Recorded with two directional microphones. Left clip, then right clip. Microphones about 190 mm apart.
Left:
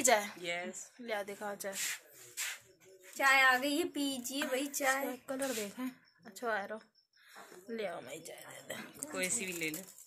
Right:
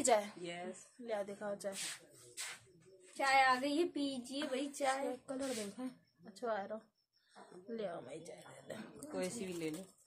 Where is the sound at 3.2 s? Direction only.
20° left (ahead or behind); by 9.0 s centre (ahead or behind).